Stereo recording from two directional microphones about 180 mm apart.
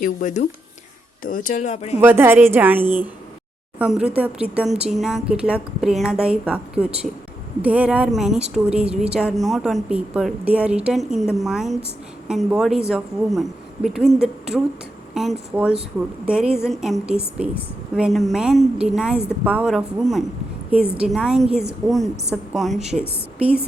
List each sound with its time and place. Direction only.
0.0 s speech: 45° left (ahead or behind)
2.0 s a woman's voice: 10° right (ahead or behind)